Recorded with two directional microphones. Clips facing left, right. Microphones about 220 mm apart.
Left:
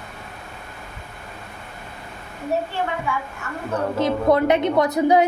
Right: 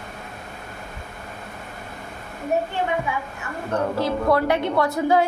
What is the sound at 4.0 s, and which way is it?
A woman's voice, 20° left (ahead or behind).